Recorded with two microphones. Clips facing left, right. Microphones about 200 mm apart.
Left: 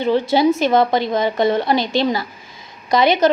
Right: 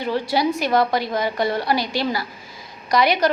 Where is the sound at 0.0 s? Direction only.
25° left (ahead or behind).